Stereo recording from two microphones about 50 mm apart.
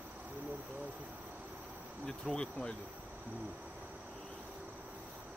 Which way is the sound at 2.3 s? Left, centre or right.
Centre.